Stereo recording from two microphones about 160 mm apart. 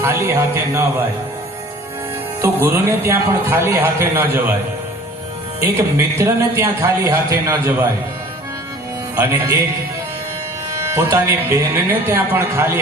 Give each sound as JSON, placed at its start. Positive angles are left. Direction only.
{"t": 0.0, "sound": "speech", "side_deg": -15}
{"t": 2.4, "sound": "speech", "side_deg": -15}
{"t": 6.1, "sound": "speech", "side_deg": -15}
{"t": 9.1, "sound": "speech", "side_deg": -15}
{"t": 10.7, "sound": "speech", "side_deg": -15}